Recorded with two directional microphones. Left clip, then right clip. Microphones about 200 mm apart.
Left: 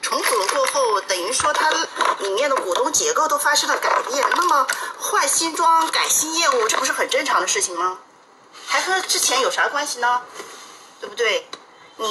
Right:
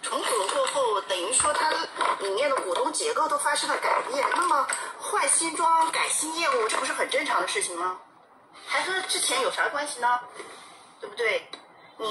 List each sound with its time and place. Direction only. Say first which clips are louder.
0.0 s music: left 7 dB; 40° left (ahead or behind)
8.6 s a woman's voice: left 7 dB; 40° left (ahead or behind)